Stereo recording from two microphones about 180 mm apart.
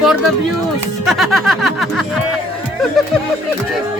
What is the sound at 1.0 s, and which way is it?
Snicker, centre (ahead or behind).